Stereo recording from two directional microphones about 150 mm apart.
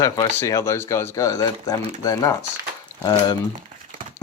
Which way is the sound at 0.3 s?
20° left (ahead or behind).